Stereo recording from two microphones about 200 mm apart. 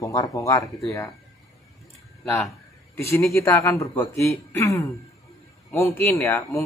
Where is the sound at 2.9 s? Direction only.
15° left (ahead or behind).